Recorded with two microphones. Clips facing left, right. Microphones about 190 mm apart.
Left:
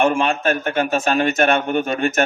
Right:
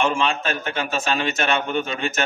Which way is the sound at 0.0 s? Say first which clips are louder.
Left 4 dB; 55° left (ahead or behind).